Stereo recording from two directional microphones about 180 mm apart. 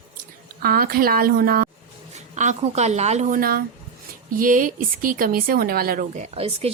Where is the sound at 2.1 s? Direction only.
40° right (ahead or behind).